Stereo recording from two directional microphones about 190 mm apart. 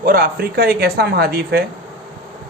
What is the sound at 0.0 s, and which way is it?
Speech, 50° right (ahead or behind).